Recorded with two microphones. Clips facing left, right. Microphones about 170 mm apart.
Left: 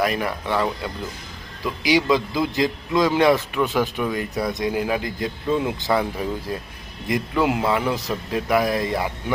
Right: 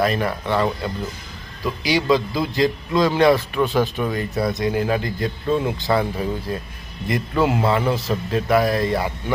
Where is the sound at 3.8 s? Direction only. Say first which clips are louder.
Right 1 dB; 20° right (ahead or behind).